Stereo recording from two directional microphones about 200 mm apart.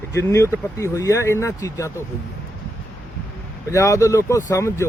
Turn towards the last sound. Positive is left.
turn(degrees=15)  # may be behind; listen again after turning